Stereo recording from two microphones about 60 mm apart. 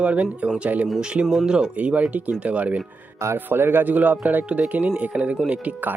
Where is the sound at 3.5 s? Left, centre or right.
Right.